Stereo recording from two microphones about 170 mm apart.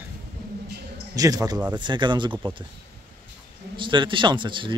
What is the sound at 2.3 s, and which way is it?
Speech, 10° right (ahead or behind).